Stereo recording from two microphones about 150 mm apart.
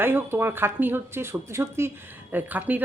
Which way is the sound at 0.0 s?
15° right (ahead or behind).